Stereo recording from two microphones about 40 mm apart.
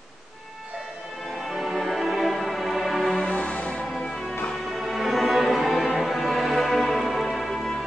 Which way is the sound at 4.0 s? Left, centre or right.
Centre.